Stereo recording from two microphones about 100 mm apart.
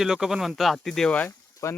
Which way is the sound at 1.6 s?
30° left (ahead or behind).